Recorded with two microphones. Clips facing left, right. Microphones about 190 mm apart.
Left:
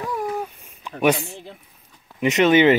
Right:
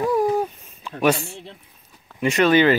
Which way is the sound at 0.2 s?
35° right (ahead or behind).